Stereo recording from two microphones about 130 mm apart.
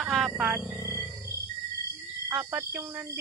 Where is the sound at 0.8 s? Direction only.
25° left (ahead or behind).